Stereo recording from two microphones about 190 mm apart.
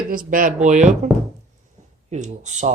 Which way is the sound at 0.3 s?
45° right (ahead or behind).